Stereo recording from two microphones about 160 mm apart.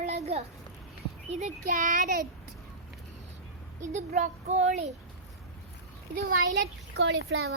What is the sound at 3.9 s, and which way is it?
A child's voice, 45° right (ahead or behind).